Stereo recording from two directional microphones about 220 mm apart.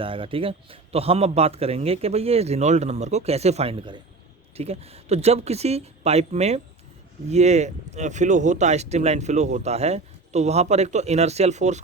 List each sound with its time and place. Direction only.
0.0 s a man's voice: 25° right (ahead or behind)